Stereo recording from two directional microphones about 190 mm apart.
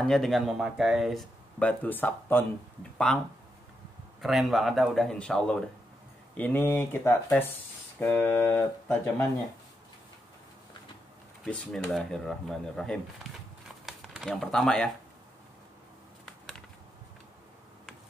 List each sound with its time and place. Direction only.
0.0 s speech: centre (ahead or behind)
11.4 s speech: centre (ahead or behind)